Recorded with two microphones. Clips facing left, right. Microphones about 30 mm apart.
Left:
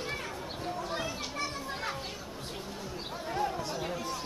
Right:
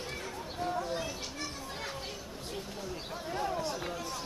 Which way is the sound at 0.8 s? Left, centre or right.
Left.